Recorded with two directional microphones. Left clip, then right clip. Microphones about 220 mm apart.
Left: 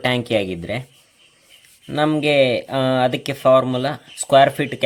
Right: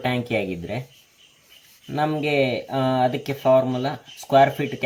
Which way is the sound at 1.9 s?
50° left (ahead or behind).